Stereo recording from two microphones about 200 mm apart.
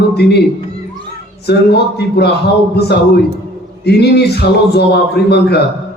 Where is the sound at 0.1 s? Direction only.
55° left (ahead or behind).